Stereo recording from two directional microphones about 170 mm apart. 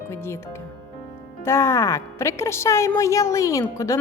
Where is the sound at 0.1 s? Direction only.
15° left (ahead or behind).